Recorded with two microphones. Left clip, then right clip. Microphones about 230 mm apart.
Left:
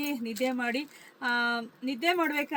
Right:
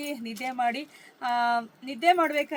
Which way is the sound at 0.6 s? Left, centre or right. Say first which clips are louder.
Right 4 dB; centre.